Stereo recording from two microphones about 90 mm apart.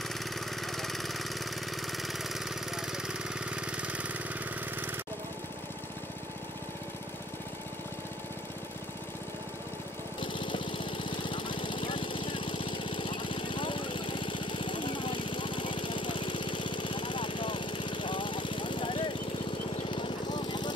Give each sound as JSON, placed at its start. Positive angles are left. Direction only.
{"t": 0.6, "sound": "vehicle", "side_deg": 0}
{"t": 10.2, "sound": "lawn mower", "side_deg": 65}
{"t": 19.9, "sound": "vehicle", "side_deg": 60}